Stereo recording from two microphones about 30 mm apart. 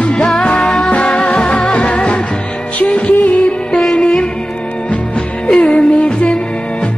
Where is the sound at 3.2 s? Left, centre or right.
Left.